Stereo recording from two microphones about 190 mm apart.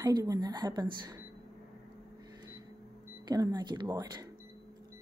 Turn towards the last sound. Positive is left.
turn(degrees=-20)  # may be behind; listen again after turning